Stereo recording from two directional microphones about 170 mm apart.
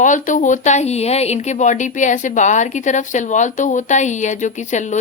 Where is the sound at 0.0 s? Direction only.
50° left (ahead or behind).